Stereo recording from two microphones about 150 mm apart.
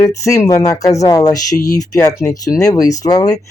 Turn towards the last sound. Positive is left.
turn(degrees=25)  # may be behind; listen again after turning